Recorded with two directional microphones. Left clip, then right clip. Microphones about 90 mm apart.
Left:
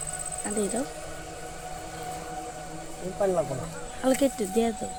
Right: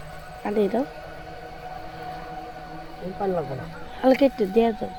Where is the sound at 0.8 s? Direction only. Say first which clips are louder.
Right 1 dB; centre (ahead or behind).